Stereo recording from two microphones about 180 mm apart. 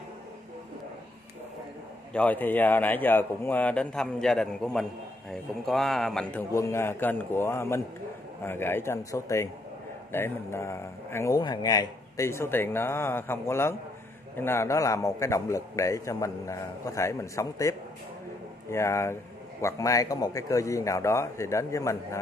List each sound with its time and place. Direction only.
2.1 s a man's voice: 10° left (ahead or behind)
6.5 s a man's voice: 15° left (ahead or behind)